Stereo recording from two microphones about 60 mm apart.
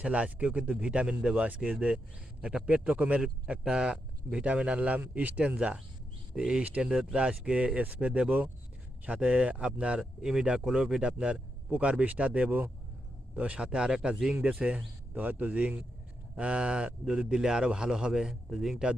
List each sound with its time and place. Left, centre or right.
0.0 s speech: right